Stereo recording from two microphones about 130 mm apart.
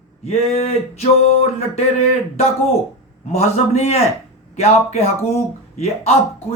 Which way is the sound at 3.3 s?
55° left (ahead or behind).